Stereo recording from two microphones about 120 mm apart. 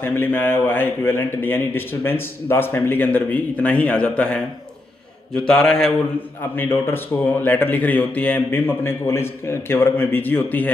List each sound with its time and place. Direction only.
0.0 s a man's voice: 15° left (ahead or behind)
5.5 s mantra: 5° left (ahead or behind)
6.5 s a man's voice: 15° left (ahead or behind)